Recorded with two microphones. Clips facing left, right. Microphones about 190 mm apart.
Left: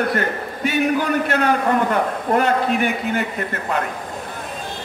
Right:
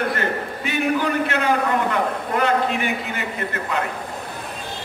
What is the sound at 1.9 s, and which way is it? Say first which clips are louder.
A man's voice: left 4 dB; 45° left (ahead or behind).